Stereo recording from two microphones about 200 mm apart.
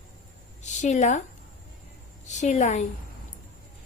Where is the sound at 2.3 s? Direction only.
35° left (ahead or behind).